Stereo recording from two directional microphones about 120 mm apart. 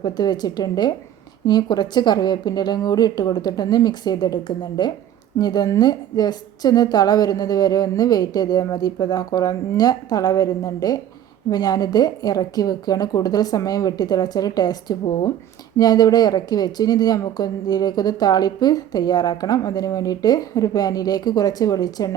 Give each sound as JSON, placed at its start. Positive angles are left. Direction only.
{"t": 0.0, "sound": "speech", "side_deg": 35}